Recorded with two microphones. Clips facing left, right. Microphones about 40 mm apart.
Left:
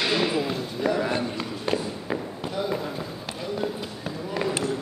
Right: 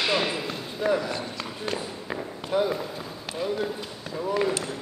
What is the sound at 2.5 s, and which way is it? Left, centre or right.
Basketball bounce, right.